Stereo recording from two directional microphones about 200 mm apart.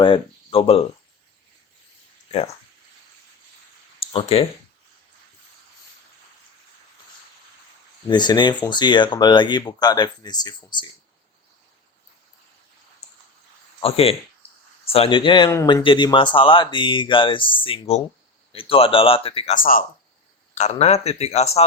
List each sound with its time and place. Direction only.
0.0 s speech: 25° left (ahead or behind)
4.0 s speech: 30° left (ahead or behind)
8.1 s speech: 20° left (ahead or behind)
13.8 s speech: 30° left (ahead or behind)
14.4 s a sound: 30° left (ahead or behind)
14.9 s speech: 25° left (ahead or behind)
19.5 s speech: 45° left (ahead or behind)
20.6 s speech: 35° left (ahead or behind)